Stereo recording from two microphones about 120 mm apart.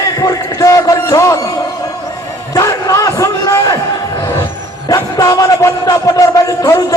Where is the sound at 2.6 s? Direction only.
30° left (ahead or behind).